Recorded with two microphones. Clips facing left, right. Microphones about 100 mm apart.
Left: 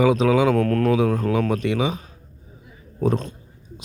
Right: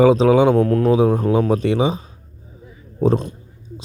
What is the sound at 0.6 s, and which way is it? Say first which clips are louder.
Speech: right 3 dB; 15° right (ahead or behind).